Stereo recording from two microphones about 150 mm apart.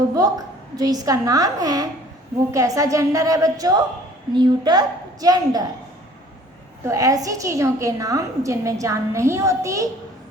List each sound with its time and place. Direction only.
0.1 s a woman's voice: 25° right (ahead or behind)
6.8 s a woman's voice: 20° right (ahead or behind)